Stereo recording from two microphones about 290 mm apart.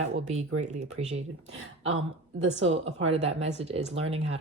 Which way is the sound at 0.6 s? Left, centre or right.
Right.